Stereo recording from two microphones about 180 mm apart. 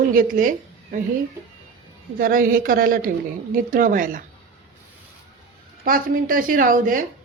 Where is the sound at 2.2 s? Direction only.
50° right (ahead or behind).